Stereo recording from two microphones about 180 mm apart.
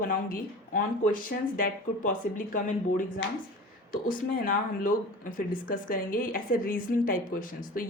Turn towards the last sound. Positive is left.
turn(degrees=50)  # may be behind; listen again after turning